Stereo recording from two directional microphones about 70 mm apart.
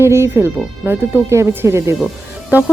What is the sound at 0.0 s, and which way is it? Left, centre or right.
Speech, right.